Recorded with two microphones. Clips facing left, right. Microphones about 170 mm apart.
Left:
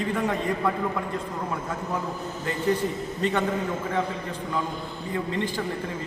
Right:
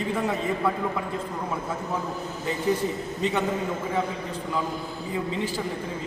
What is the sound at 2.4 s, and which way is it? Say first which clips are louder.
A man's voice: even; 10° right (ahead or behind).